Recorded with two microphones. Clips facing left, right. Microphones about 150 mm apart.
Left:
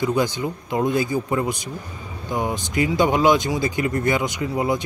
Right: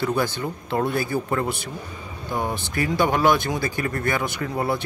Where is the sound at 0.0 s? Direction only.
15° left (ahead or behind).